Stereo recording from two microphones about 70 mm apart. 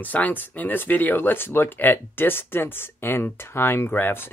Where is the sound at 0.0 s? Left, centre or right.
Left.